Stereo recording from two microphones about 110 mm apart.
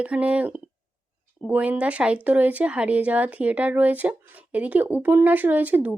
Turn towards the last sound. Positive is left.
turn(degrees=-15)  # may be behind; listen again after turning